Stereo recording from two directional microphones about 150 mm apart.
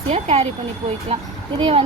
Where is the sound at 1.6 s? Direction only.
40° right (ahead or behind).